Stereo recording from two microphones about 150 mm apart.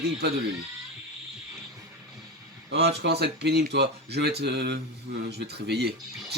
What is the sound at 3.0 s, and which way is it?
Speech, 90° right.